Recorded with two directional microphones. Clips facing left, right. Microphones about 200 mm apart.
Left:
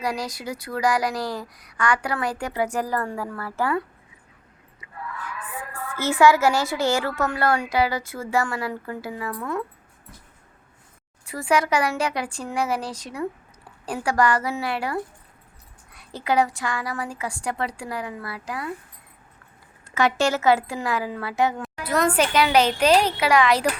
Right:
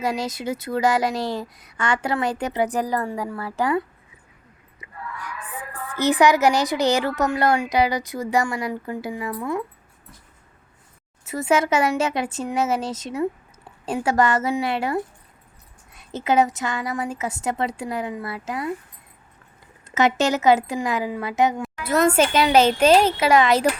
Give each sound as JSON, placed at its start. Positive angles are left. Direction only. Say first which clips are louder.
{"t": 0.0, "sound": "speech", "louder": "right 3 dB", "side_deg": -25}
{"t": 6.0, "sound": "a woman's voice", "louder": "right 1 dB", "side_deg": -15}
{"t": 11.3, "sound": "speech", "louder": "right 2 dB", "side_deg": -20}
{"t": 19.9, "sound": "speech", "louder": "right 2 dB", "side_deg": -20}